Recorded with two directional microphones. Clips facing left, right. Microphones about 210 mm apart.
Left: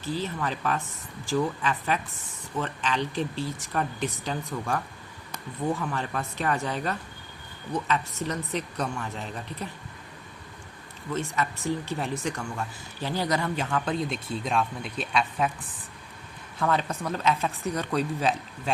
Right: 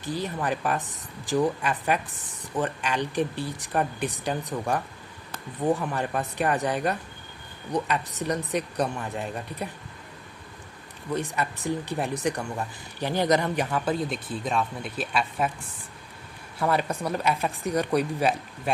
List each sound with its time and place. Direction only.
0.0 s speech: 15° right (ahead or behind)
11.1 s speech: 15° right (ahead or behind)
16.6 s speech: 10° right (ahead or behind)